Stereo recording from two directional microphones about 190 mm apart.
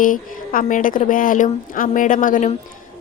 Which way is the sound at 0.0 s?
45° left (ahead or behind).